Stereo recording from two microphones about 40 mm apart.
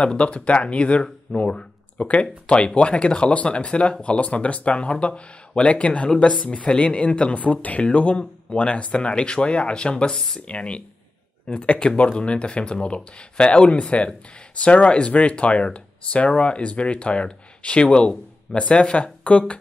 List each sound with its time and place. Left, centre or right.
0.0 s speech: left